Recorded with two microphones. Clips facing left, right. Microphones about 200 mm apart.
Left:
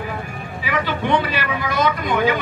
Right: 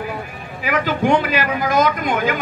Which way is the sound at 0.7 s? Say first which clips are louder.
Right 3 dB; 45° right (ahead or behind).